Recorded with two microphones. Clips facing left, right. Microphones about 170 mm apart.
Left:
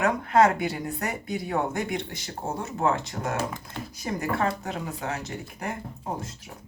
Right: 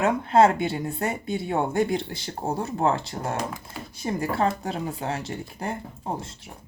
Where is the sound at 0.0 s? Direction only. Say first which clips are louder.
Right 2 dB; 30° right (ahead or behind).